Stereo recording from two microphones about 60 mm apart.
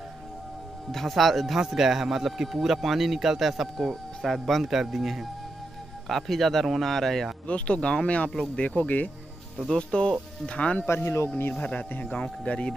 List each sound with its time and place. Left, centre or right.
0.9 s speech: centre
7.4 s speech: centre
9.7 s speech: centre
10.9 s speech: left
11.9 s speech: left